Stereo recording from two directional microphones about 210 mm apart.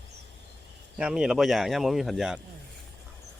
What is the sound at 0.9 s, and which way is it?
Speech, 5° right (ahead or behind).